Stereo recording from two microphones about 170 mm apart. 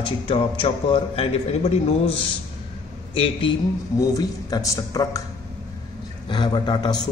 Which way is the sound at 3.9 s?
20° left (ahead or behind).